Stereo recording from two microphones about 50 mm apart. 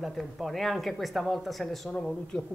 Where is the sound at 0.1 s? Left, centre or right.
Centre.